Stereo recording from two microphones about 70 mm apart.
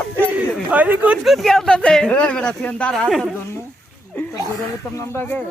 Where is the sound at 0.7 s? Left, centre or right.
Right.